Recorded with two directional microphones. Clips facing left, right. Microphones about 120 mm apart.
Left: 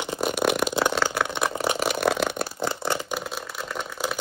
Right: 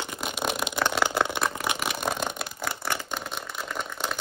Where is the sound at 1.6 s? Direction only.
35° left (ahead or behind).